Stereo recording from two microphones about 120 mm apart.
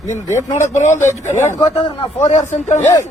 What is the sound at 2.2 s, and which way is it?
Speech, 80° left.